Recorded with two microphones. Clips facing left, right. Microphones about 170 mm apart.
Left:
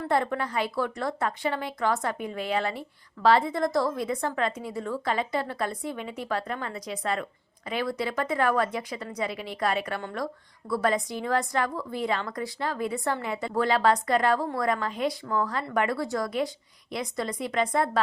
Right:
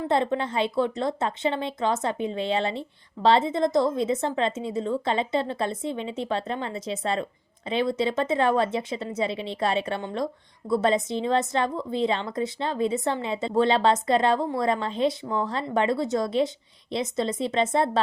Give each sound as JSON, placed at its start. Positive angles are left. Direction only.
{"t": 0.0, "sound": "a woman's voice", "side_deg": -20}